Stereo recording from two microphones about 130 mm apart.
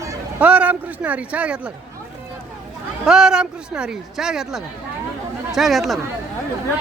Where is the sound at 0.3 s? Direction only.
10° right (ahead or behind).